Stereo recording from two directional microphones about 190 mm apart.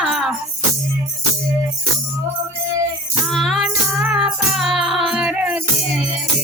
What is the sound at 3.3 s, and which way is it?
Music, centre (ahead or behind).